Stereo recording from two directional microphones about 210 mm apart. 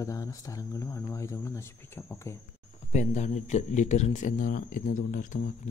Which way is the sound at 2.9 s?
35° left (ahead or behind).